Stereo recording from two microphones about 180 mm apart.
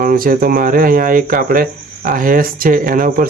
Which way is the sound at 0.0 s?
50° right (ahead or behind).